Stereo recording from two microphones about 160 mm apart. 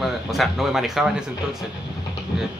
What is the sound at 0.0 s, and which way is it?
Speech, centre (ahead or behind).